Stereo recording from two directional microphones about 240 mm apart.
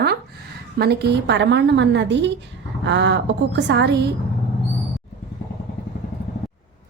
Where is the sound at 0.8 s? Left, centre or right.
Right.